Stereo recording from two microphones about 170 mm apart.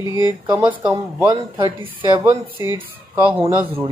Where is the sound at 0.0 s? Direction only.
20° right (ahead or behind).